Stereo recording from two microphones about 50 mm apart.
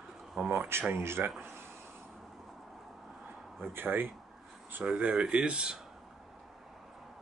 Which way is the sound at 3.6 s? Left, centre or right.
Right.